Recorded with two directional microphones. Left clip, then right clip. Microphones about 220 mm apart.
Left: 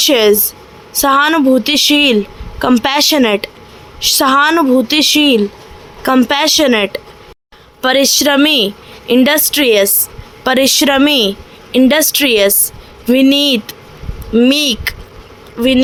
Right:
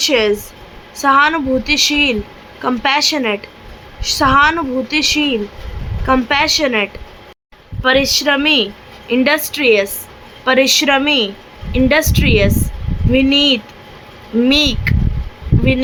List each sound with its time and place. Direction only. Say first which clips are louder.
0.0 s a woman's voice: left 4 dB; 35° left (ahead or behind)